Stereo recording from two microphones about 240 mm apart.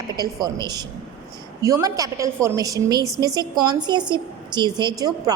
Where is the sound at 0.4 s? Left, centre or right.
Centre.